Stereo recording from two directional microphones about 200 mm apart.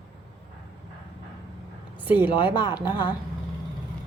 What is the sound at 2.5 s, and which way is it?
Speech, 20° left (ahead or behind).